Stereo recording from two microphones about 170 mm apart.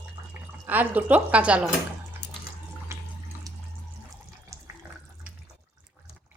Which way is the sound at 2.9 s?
15° right (ahead or behind).